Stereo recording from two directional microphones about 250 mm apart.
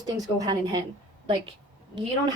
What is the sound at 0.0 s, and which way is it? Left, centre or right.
Speech, centre.